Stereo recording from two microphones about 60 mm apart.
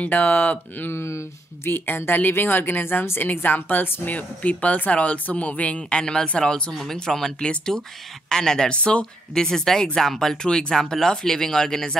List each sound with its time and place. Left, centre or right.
0.0 s a woman's voice: left
1.0 s speech: left
1.7 s a woman's voice: left; by 12.0 s centre